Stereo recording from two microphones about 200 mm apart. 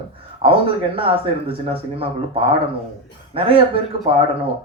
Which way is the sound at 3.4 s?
25° right (ahead or behind).